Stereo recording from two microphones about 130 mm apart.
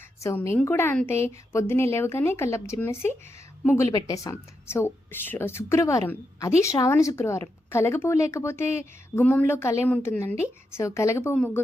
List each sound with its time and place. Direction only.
0.2 s a woman's voice: 20° left (ahead or behind)